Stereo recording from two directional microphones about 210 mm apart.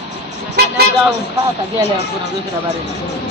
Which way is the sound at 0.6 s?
50° right (ahead or behind).